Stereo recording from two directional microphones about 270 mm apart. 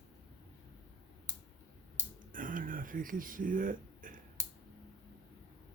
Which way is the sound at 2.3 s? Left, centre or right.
Right.